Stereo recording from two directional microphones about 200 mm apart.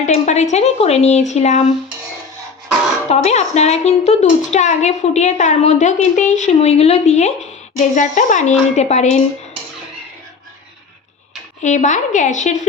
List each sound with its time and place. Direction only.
0.0 s a woman's voice: 35° left (ahead or behind)
3.1 s a woman's voice: 35° left (ahead or behind)
11.6 s a woman's voice: 35° left (ahead or behind)